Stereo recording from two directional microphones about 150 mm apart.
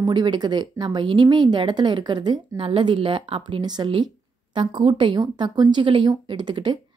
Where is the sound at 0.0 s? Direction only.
30° right (ahead or behind).